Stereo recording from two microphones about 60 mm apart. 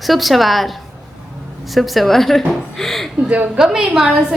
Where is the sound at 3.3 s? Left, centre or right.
Right.